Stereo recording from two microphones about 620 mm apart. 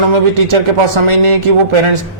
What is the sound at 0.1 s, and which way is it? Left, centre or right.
A man's voice, right.